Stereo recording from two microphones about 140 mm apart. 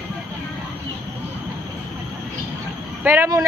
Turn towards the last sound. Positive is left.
turn(degrees=-15)  # may be behind; listen again after turning